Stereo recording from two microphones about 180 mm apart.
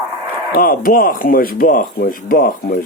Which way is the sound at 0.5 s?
50° left (ahead or behind).